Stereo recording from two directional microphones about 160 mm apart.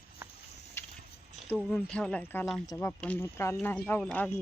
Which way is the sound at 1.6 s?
Centre (ahead or behind).